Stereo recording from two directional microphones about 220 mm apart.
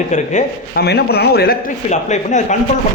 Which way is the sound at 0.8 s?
45° left (ahead or behind).